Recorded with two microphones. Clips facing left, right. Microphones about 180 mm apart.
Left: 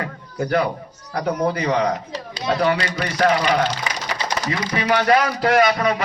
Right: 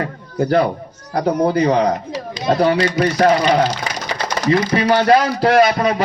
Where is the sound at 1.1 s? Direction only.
30° right (ahead or behind).